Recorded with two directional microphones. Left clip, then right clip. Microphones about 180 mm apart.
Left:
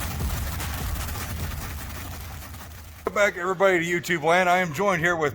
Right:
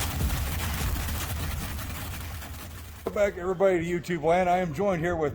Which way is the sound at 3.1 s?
Centre (ahead or behind).